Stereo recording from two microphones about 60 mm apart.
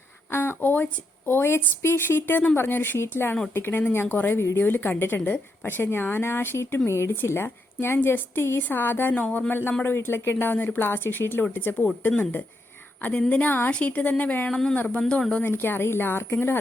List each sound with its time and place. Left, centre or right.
0.3 s a woman's voice: left
9.1 s a woman's voice: left
9.5 s a woman's voice: left
13.0 s a woman's voice: left
14.5 s speech: centre
14.8 s a woman's voice: left
15.5 s a woman's voice: left